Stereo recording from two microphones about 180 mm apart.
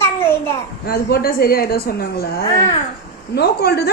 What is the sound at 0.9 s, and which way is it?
A woman's voice, 55° left (ahead or behind).